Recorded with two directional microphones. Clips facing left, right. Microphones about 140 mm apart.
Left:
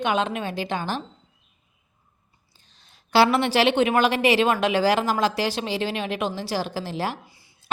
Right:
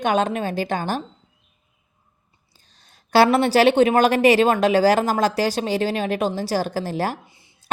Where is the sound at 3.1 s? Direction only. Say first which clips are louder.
Right 3 dB; 45° right (ahead or behind).